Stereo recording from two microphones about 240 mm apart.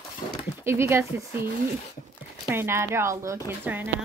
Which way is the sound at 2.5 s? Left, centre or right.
Centre.